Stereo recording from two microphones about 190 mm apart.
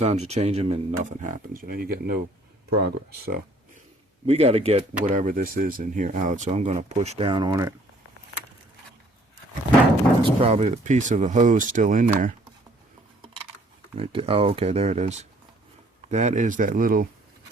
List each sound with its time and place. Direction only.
0.0 s speech: 35° right (ahead or behind); by 3.3 s 60° right (ahead or behind)
4.3 s speech: 30° right (ahead or behind)
10.2 s speech: 30° right (ahead or behind)
13.9 s speech: 30° right (ahead or behind); by 17.1 s 50° right (ahead or behind)